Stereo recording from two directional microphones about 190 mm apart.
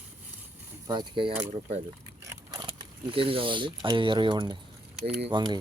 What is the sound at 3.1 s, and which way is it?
Speech, 30° right (ahead or behind).